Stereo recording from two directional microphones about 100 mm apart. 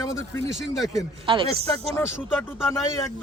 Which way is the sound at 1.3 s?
60° right (ahead or behind).